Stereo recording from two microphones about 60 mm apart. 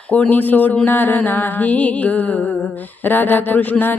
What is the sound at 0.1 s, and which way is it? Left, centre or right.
Music, left.